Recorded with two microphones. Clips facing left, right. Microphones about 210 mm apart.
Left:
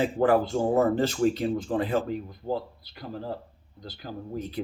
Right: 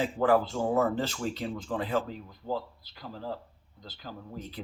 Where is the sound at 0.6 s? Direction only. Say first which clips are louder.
Left 4 dB; 40° left (ahead or behind).